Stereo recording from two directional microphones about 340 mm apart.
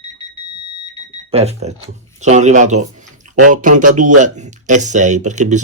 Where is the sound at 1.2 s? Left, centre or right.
Centre.